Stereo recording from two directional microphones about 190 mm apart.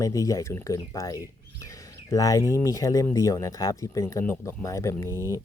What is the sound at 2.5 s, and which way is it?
Speech, 15° left (ahead or behind).